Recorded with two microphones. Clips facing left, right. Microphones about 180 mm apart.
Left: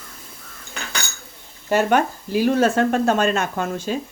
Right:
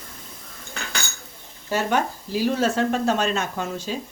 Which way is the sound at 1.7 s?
60° left (ahead or behind).